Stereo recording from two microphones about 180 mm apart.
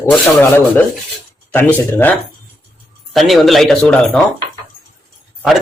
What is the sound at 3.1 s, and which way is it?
A man's voice, centre (ahead or behind).